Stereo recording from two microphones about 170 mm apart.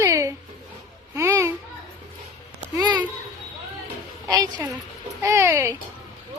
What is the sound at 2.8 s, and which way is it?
Speech, 25° right (ahead or behind).